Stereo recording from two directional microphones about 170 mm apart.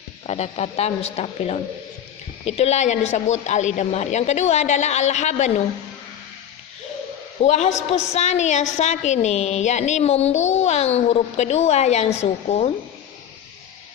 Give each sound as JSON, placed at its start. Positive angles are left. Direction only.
{"t": 0.3, "sound": "a woman's voice", "side_deg": 40}
{"t": 7.4, "sound": "a woman's voice", "side_deg": 45}